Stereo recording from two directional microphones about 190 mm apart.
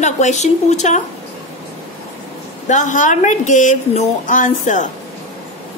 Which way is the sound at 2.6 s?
40° left (ahead or behind).